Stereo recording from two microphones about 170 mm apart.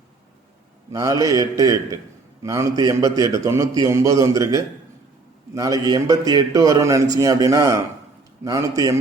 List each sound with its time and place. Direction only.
0.9 s a man's voice: 20° right (ahead or behind)